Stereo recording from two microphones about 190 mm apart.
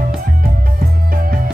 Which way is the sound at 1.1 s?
50° right (ahead or behind).